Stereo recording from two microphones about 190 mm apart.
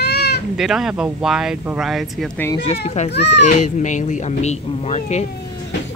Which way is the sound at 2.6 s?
35° left (ahead or behind).